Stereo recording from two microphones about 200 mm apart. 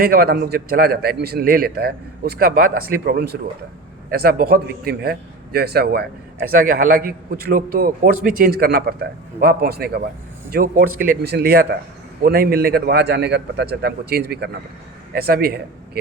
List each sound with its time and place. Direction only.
0.0 s a man's voice: 50° right (ahead or behind)